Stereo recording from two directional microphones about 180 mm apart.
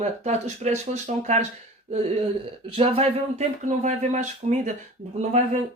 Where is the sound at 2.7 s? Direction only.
30° right (ahead or behind).